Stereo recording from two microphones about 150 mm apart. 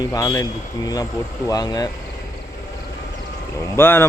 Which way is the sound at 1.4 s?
25° left (ahead or behind).